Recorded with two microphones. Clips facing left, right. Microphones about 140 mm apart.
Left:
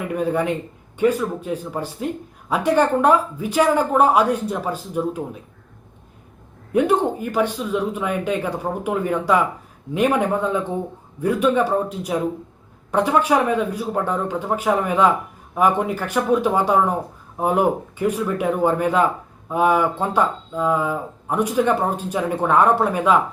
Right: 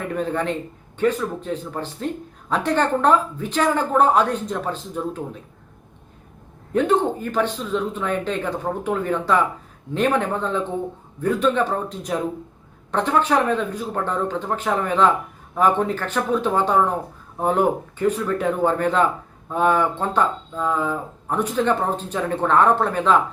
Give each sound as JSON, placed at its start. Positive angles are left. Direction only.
{"t": 0.0, "sound": "a man's voice", "side_deg": 10}
{"t": 6.7, "sound": "speech", "side_deg": 10}